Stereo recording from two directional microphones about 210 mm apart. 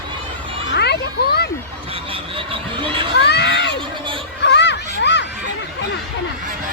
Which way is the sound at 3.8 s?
25° right (ahead or behind).